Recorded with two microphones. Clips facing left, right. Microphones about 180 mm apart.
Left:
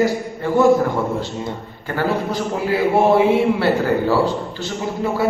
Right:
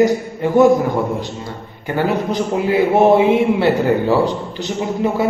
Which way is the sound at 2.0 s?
20° right (ahead or behind).